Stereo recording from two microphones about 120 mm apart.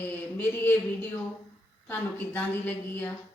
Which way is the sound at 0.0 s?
15° left (ahead or behind).